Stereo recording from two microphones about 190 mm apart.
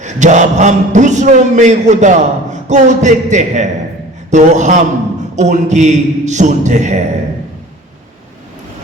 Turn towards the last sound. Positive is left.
turn(degrees=-40)  # may be behind; listen again after turning